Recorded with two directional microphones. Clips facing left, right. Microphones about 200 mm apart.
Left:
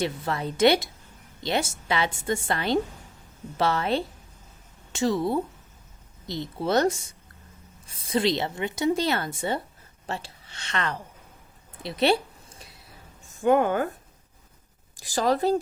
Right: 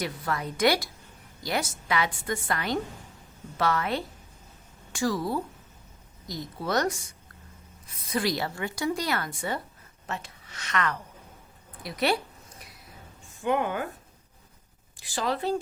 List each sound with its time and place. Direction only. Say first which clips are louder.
0.0 s a woman's voice: left 3 dB; 25° left (ahead or behind)
11.8 s a sound: left 4 dB; 25° left (ahead or behind)
13.4 s a woman's voice: left 6 dB; 45° left (ahead or behind)
14.9 s speech: left 6 dB; 40° left (ahead or behind)